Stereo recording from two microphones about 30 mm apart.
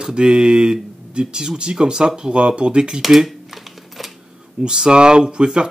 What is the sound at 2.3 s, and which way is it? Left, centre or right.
Speech, right.